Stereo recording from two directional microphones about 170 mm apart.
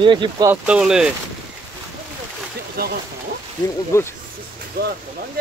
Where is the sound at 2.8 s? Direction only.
60° right (ahead or behind).